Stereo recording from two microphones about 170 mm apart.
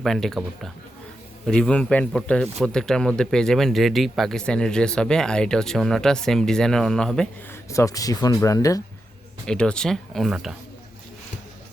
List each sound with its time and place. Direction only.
0.0 s a man's voice: centre (ahead or behind)
7.7 s speech: 20° left (ahead or behind)
9.5 s a man's voice: 5° left (ahead or behind)